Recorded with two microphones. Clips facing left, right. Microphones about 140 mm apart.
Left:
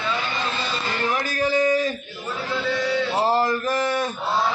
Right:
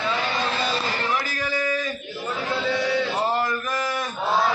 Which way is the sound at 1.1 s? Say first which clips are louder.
Left 4 dB; 35° left (ahead or behind).